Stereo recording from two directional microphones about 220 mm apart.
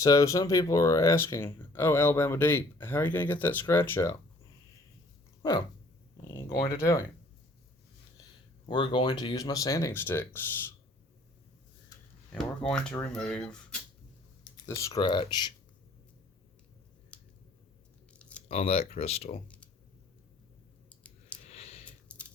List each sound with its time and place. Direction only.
0.0 s speech: 15° left (ahead or behind)
6.2 s speech: 10° left (ahead or behind)
8.6 s speech: 20° left (ahead or behind)
12.3 s speech: 5° left (ahead or behind)
14.5 s speech: 15° left (ahead or behind)
18.1 s a sound: 5° left (ahead or behind)
18.4 s speech: 25° left (ahead or behind)
20.9 s clicking: 5° left (ahead or behind)
21.4 s a sound: 30° left (ahead or behind)
22.1 s a sound: 5° left (ahead or behind)